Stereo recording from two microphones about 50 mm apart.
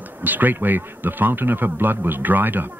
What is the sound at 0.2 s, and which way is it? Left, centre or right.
Speech, right.